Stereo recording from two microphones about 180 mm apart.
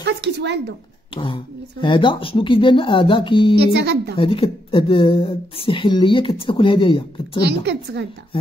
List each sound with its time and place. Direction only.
0.0 s a sound: 70° right (ahead or behind)
1.1 s speech: 25° left (ahead or behind)
3.5 s a woman's voice: 65° right (ahead or behind)
4.2 s speech: 30° left (ahead or behind)
7.4 s a woman's voice: 70° right (ahead or behind)